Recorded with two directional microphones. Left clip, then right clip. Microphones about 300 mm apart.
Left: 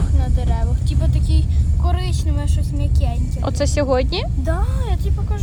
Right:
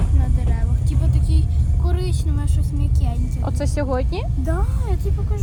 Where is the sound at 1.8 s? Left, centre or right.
Centre.